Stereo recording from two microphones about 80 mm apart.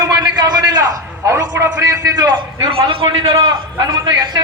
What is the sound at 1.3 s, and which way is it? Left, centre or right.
Speech, right.